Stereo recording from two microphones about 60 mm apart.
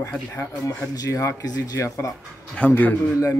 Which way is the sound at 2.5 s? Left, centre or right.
Left.